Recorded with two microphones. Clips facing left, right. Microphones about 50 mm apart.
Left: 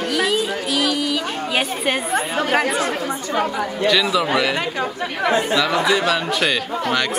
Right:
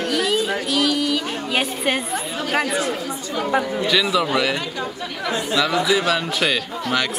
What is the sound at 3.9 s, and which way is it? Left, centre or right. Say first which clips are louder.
Speech: left 4 dB; centre.